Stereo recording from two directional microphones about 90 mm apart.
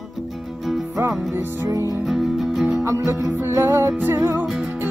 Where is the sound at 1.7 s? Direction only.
40° right (ahead or behind).